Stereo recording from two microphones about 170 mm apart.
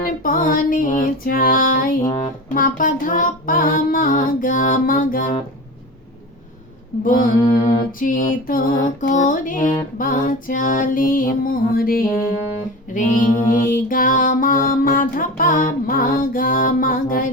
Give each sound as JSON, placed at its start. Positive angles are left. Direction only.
{"t": 0.0, "sound": "music", "side_deg": 55}
{"t": 2.0, "sound": "music", "side_deg": 25}
{"t": 2.6, "sound": "music", "side_deg": 50}
{"t": 7.0, "sound": "mantra", "side_deg": 55}
{"t": 7.5, "sound": "music", "side_deg": 55}